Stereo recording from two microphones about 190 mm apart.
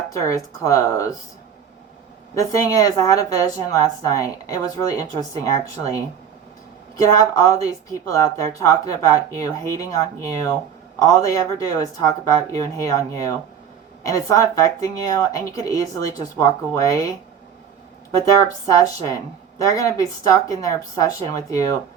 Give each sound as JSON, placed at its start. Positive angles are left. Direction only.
{"t": 0.1, "sound": "speech", "side_deg": 15}
{"t": 2.3, "sound": "speech", "side_deg": 15}
{"t": 7.0, "sound": "speech", "side_deg": 15}
{"t": 18.3, "sound": "speech", "side_deg": 15}